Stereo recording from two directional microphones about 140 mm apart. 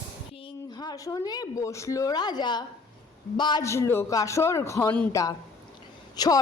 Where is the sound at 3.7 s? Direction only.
20° left (ahead or behind).